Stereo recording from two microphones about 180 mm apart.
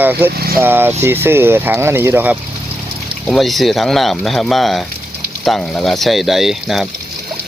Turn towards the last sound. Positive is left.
turn(degrees=0)  # may be behind; listen again after turning